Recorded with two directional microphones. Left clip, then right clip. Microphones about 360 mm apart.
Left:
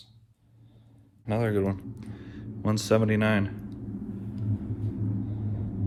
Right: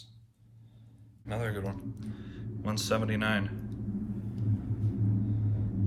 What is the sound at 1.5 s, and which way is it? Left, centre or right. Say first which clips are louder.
Speech: left 10 dB; centre.